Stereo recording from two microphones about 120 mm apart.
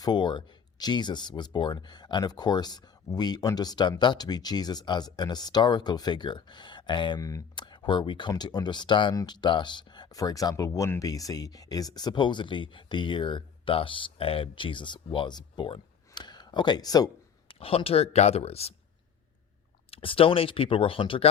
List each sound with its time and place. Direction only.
0.0 s speech: 40° left (ahead or behind)
7.2 s speech: 30° left (ahead or behind)
17.5 s speech: 50° left (ahead or behind)
19.9 s speech: 50° left (ahead or behind)